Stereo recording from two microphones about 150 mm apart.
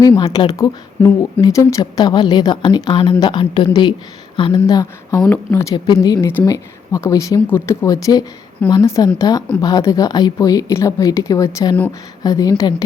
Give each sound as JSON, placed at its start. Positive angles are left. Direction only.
{"t": 0.2, "sound": "a woman's voice", "side_deg": 30}
{"t": 5.7, "sound": "a woman's voice", "side_deg": 30}